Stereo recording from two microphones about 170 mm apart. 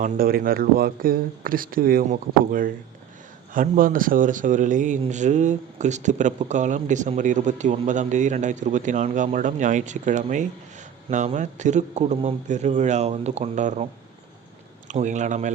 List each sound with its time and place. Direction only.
0.0 s speech: 60° right (ahead or behind); by 13.8 s 45° right (ahead or behind)
14.8 s speech: 45° right (ahead or behind)